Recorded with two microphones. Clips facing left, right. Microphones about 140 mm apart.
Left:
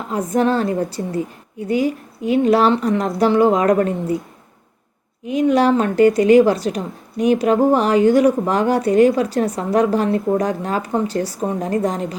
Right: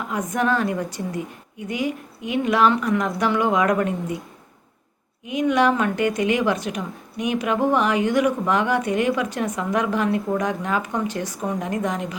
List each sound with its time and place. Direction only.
0.1 s a woman's voice: 30° left (ahead or behind)
5.2 s a woman's voice: 35° left (ahead or behind)